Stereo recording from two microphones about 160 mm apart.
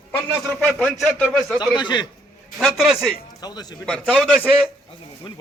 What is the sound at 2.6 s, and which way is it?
Speech, centre (ahead or behind).